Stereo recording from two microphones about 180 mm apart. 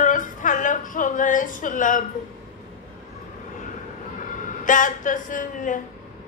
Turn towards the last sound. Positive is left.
turn(degrees=45)  # may be behind; listen again after turning